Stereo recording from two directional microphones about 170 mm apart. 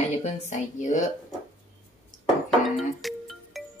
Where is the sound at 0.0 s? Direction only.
45° left (ahead or behind).